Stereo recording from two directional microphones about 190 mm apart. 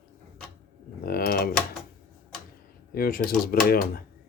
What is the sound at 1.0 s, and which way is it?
Speech, 55° left (ahead or behind).